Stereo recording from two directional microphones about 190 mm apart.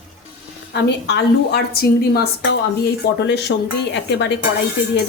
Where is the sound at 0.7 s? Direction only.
60° left (ahead or behind).